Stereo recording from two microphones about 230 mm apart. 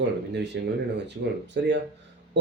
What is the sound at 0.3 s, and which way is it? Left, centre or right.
Speech, right.